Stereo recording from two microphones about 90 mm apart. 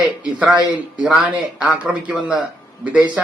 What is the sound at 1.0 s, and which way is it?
A man's voice, 10° right (ahead or behind).